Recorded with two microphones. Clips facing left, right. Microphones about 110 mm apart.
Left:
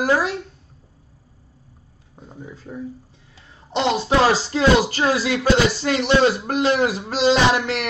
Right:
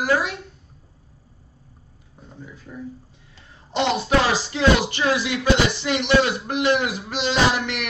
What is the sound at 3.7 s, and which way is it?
Speech, 25° left (ahead or behind).